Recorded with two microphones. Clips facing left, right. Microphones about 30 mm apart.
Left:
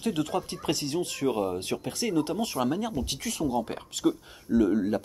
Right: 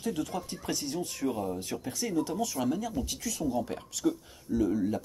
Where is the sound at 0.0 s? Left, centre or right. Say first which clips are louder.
Left 4 dB; left.